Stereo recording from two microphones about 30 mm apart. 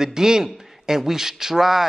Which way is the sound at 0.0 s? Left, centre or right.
Centre.